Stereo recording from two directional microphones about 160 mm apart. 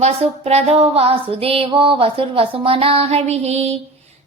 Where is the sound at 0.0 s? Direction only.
40° right (ahead or behind).